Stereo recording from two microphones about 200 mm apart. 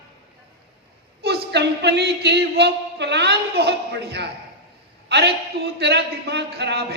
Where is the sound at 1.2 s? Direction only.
55° right (ahead or behind).